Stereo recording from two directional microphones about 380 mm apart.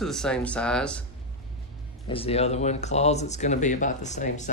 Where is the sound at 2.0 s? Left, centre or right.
Centre.